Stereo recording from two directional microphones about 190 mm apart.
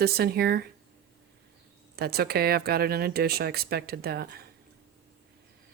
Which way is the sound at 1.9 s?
55° right (ahead or behind).